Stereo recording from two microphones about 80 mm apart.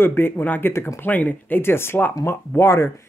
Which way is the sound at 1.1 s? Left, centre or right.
Centre.